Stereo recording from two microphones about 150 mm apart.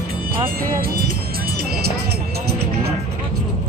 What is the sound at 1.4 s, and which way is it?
Music, 90° right.